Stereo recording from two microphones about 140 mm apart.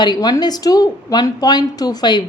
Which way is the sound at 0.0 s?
30° left (ahead or behind).